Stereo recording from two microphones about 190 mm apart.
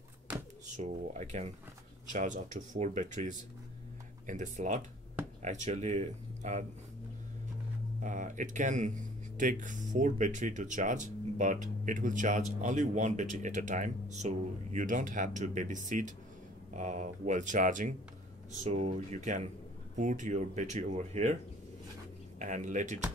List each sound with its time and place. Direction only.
0.7 s speech: 40° right (ahead or behind)
8.0 s speech: 40° right (ahead or behind)
22.4 s speech: 40° right (ahead or behind)